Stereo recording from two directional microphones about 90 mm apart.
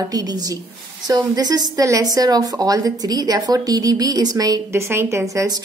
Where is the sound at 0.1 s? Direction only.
45° right (ahead or behind).